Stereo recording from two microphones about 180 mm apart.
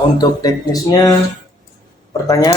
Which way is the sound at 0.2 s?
20° left (ahead or behind).